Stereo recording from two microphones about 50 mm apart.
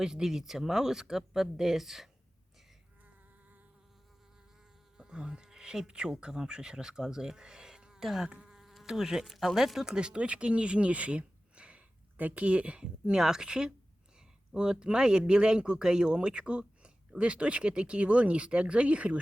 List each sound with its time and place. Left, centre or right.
0.0 s speech: centre
4.9 s speech: centre
8.3 s insect: centre
9.2 s speech: centre
9.9 s speech: centre